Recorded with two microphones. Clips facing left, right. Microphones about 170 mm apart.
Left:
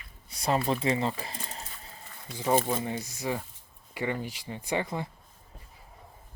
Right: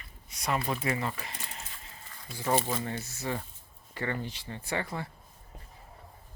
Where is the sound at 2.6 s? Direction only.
20° left (ahead or behind).